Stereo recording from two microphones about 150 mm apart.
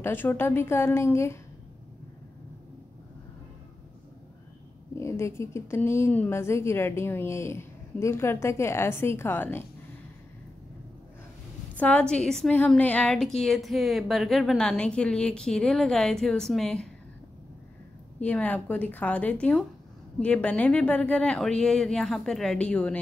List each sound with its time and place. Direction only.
0.0 s a woman's voice: 15° left (ahead or behind)
4.9 s a woman's voice: 20° left (ahead or behind)
11.7 s a woman's voice: 10° left (ahead or behind)
18.2 s a woman's voice: 10° left (ahead or behind)